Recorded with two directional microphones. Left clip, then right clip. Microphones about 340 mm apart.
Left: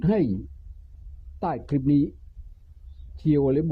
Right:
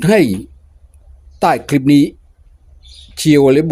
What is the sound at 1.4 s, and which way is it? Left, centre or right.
Speech, centre.